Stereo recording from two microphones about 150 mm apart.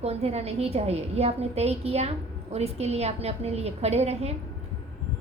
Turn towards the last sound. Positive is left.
turn(degrees=-45)  # may be behind; listen again after turning